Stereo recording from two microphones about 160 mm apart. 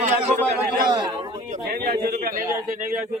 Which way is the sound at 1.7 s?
70° right (ahead or behind).